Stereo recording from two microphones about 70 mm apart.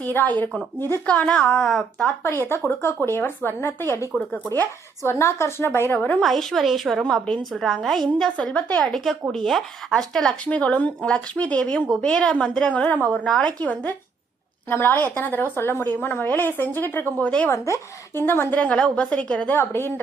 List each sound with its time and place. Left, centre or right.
0.0 s a woman's voice: left
1.0 s a woman's voice: centre
1.6 s speech: centre
2.2 s a woman's voice: left
6.2 s a woman's voice: centre
7.0 s speech: centre
7.6 s a woman's voice: centre; by 17.5 s left
17.5 s a woman's voice: left; by 19.5 s centre
19.5 s a woman's voice: left